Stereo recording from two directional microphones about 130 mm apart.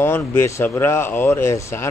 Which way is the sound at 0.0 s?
20° left (ahead or behind).